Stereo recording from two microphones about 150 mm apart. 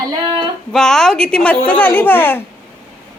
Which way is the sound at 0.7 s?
5° left (ahead or behind).